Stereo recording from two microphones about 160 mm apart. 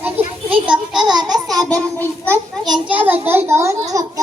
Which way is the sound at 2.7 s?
10° right (ahead or behind).